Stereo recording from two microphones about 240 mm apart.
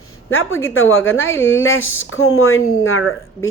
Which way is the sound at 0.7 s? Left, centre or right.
Left.